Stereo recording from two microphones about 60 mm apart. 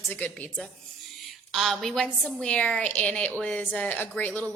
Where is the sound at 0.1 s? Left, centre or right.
Left.